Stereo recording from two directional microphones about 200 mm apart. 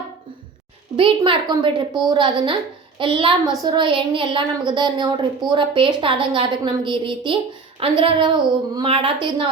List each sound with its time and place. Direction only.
0.9 s a woman's voice: 25° right (ahead or behind)